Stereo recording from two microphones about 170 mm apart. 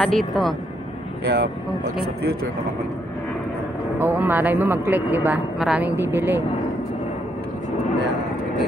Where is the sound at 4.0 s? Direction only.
10° right (ahead or behind).